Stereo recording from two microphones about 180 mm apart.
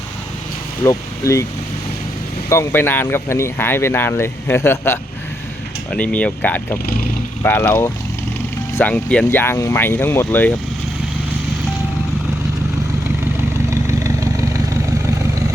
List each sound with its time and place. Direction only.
0.9 s speech: 15° left (ahead or behind)
2.5 s speech: 15° left (ahead or behind)
13.7 s vehicle: 15° right (ahead or behind)